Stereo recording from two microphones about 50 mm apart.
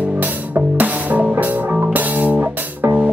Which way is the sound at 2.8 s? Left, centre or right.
Right.